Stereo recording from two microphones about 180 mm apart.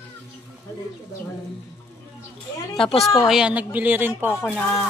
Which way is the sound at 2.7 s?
30° left (ahead or behind).